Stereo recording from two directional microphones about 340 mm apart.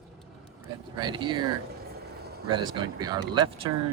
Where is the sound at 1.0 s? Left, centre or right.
Centre.